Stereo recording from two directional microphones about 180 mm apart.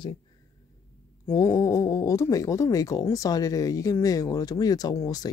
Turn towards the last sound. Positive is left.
turn(degrees=20)  # may be behind; listen again after turning